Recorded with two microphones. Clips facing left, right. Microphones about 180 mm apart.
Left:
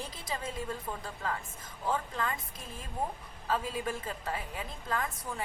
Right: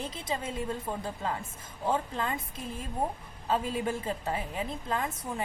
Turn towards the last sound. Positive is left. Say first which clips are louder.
# right 3 dB
turn(degrees=-25)  # may be behind; listen again after turning